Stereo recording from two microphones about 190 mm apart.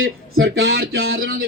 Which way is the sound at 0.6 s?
55° right (ahead or behind).